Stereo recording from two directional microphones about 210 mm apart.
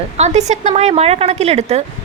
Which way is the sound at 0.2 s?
35° right (ahead or behind).